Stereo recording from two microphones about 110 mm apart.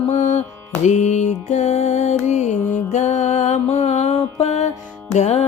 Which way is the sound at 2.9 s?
90° left.